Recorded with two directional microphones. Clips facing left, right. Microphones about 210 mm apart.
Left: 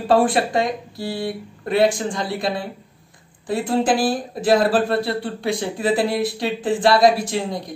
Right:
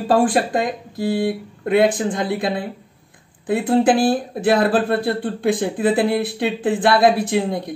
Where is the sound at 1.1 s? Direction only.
55° right (ahead or behind).